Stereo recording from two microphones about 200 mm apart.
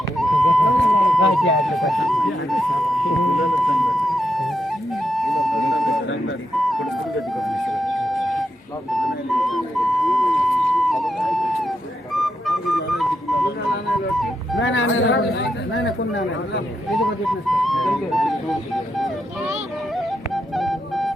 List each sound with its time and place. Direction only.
0.2 s a sound: centre (ahead or behind)
6.6 s vehicle: centre (ahead or behind)
7.3 s flute: centre (ahead or behind)
8.9 s music: centre (ahead or behind)
14.6 s a sound: 70° left (ahead or behind)
16.9 s flute: centre (ahead or behind)
20.1 s music: centre (ahead or behind)